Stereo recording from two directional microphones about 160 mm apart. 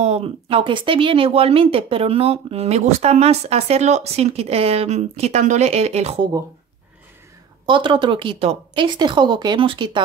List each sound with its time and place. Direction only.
0.0 s speech: 40° right (ahead or behind)
7.6 s a woman's voice: 30° right (ahead or behind)